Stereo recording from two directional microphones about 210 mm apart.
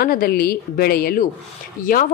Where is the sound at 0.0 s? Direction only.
45° left (ahead or behind).